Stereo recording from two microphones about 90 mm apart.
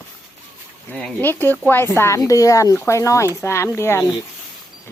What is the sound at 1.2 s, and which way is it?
A woman's voice, 25° left (ahead or behind).